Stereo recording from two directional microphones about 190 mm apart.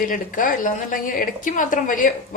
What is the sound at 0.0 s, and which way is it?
A woman's voice, 45° left (ahead or behind).